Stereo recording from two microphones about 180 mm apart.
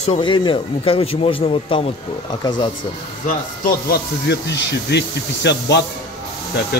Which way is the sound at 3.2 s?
55° left (ahead or behind).